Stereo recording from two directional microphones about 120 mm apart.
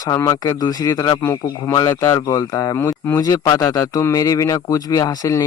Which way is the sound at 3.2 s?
30° left (ahead or behind).